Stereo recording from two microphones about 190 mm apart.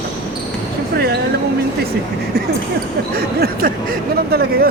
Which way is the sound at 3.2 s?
50° right (ahead or behind).